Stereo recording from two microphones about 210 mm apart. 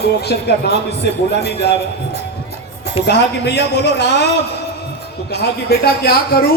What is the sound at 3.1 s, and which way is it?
Speech, 50° left (ahead or behind).